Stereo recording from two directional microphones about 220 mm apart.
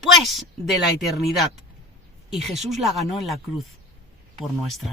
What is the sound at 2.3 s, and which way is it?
Speech, centre (ahead or behind).